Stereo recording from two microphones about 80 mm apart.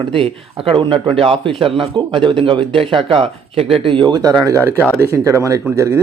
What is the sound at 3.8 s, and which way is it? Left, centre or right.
Speech, right.